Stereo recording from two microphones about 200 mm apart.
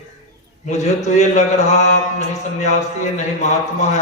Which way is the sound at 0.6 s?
35° left (ahead or behind).